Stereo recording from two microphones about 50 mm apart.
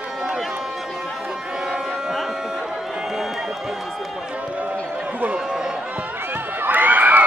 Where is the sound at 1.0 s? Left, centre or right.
Centre.